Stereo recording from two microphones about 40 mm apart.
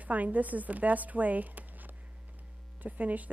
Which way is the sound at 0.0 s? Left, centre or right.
Right.